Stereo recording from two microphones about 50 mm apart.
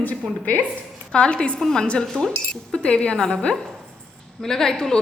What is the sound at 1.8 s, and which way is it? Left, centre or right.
A woman's voice, left.